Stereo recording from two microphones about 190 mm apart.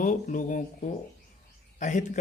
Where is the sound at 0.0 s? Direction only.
45° left (ahead or behind).